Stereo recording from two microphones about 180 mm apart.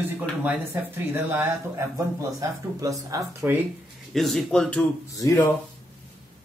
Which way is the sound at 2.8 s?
20° right (ahead or behind).